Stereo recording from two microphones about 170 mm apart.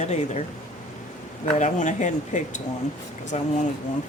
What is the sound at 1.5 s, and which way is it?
Speech, 45° left (ahead or behind).